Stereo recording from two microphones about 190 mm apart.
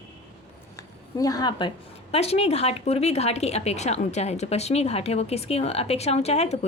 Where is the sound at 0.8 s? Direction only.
20° left (ahead or behind).